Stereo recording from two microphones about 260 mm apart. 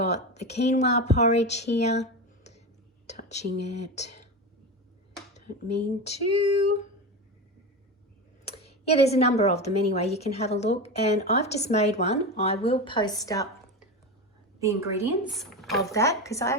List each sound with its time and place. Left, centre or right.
0.0 s a woman's voice: left
2.4 s a sound: left
3.1 s a woman's voice: left
6.0 s a woman's voice: left
8.4 s a woman's voice: left
14.6 s speech: centre
15.9 s a woman's voice: centre